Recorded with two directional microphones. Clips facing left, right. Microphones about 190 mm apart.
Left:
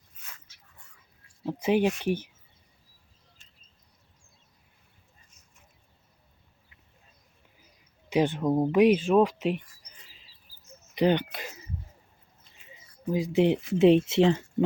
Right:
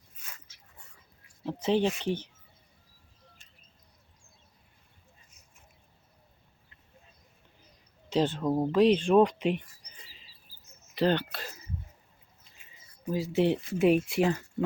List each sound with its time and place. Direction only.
1.5 s speech: 10° left (ahead or behind)
8.1 s speech: 15° left (ahead or behind)
10.9 s speech: 15° left (ahead or behind)
13.1 s speech: 15° left (ahead or behind)